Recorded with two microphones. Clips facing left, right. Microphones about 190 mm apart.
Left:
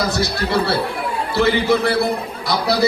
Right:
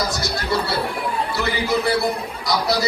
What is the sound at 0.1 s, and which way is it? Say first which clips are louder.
Speech: left 4 dB; 60° left (ahead or behind).